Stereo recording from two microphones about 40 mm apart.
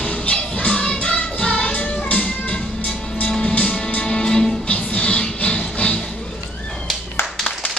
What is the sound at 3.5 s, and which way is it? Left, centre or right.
Music, left.